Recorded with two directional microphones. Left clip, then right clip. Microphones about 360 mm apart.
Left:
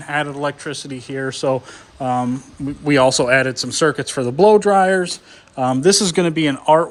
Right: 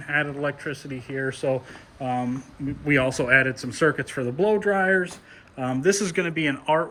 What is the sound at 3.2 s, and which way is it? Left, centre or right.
Speech, centre.